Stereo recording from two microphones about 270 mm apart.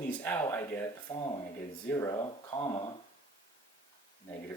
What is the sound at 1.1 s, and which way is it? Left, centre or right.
Speech, left.